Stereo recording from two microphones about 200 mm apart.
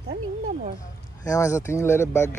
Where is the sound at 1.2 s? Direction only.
15° left (ahead or behind).